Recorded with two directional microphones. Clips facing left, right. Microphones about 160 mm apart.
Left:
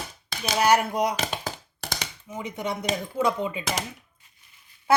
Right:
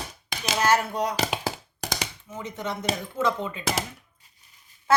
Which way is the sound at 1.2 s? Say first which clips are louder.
Right 3 dB; 10° right (ahead or behind).